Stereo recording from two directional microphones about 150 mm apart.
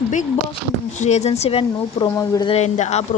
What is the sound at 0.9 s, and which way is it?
A woman's voice, 50° left (ahead or behind).